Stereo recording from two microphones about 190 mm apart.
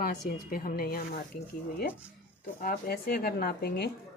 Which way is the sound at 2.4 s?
50° left (ahead or behind).